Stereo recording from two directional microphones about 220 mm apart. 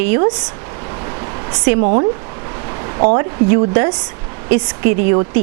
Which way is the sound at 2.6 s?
20° right (ahead or behind).